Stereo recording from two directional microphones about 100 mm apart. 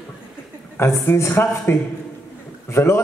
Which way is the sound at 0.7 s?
25° left (ahead or behind).